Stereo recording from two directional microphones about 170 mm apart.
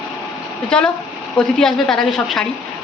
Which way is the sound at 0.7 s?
5° left (ahead or behind).